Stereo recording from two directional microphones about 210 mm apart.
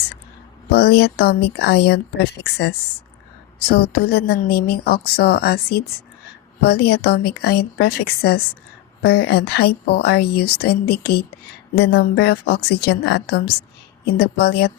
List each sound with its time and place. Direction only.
0.7 s a woman's voice: 50° left (ahead or behind)